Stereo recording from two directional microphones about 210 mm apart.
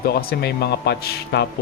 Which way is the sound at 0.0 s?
45° left (ahead or behind).